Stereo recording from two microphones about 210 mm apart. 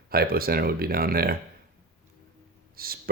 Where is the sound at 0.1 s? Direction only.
45° right (ahead or behind).